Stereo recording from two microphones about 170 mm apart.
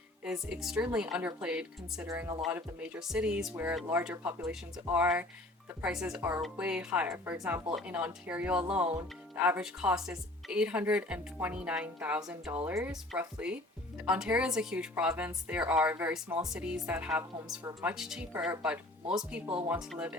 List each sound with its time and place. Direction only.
0.3 s a woman's voice: 5° right (ahead or behind)
17.8 s a woman's voice: centre (ahead or behind)